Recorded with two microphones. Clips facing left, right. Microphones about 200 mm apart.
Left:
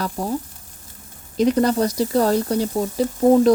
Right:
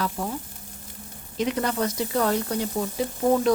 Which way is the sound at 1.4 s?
35° left (ahead or behind).